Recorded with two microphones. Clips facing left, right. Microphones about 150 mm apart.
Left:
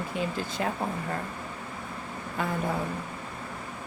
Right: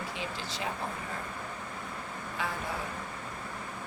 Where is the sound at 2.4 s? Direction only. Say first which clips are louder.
Left 5 dB; 50° left (ahead or behind).